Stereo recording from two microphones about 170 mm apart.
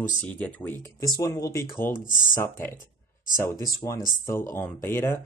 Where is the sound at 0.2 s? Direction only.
10° left (ahead or behind).